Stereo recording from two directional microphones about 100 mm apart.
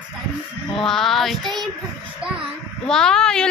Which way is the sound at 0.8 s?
5° left (ahead or behind).